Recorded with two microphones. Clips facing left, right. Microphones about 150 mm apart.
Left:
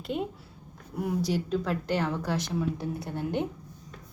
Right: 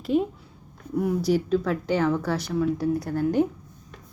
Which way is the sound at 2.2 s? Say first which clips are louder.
Right 5 dB; 20° left (ahead or behind).